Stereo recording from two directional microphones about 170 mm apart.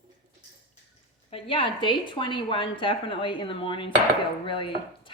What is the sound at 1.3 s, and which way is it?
A woman's voice, 30° left (ahead or behind).